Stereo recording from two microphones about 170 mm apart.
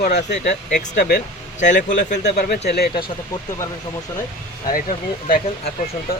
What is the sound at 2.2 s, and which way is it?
Speech, 70° left (ahead or behind).